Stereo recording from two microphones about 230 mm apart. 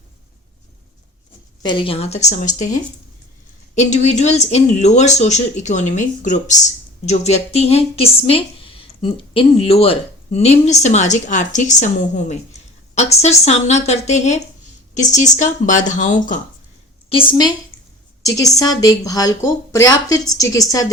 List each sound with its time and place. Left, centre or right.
1.6 s speech: left
3.8 s speech: left
17.1 s speech: left